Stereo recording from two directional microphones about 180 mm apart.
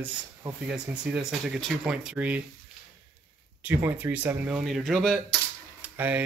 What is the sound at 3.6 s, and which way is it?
Speech, 10° right (ahead or behind).